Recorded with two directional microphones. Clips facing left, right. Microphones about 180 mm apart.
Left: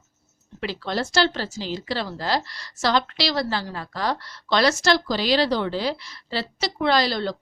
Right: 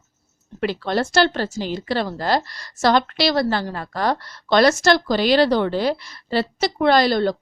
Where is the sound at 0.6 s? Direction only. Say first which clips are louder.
Right 5 dB; 55° right (ahead or behind).